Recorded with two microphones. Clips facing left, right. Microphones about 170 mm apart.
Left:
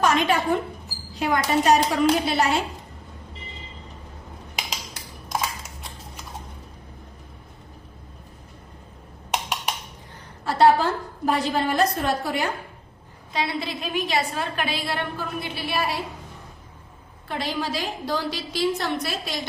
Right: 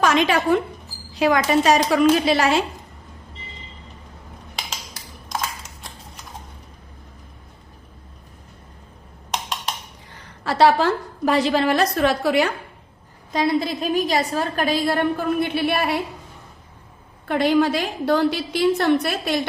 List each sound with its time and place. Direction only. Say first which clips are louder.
0.0 s a woman's voice: right 3 dB; 90° right
9.3 s wood block: even; 10° left (ahead or behind)
10.4 s a woman's voice: right 1 dB; 90° right
13.3 s a woman's voice: right 7 dB; 45° right (ahead or behind); by 16.0 s 60° right (ahead or behind)
17.2 s a woman's voice: right 10 dB; 60° right (ahead or behind)